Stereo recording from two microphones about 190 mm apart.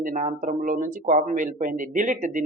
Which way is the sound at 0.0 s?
40° right (ahead or behind).